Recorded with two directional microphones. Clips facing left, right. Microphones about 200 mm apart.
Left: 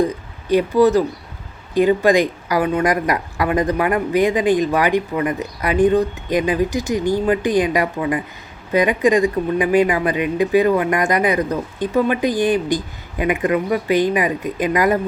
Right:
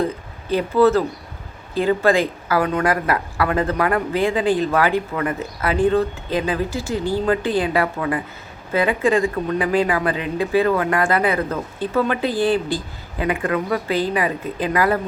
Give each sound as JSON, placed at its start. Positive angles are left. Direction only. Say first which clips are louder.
{"t": 0.0, "sound": "speech", "louder": "left 3 dB", "side_deg": 15}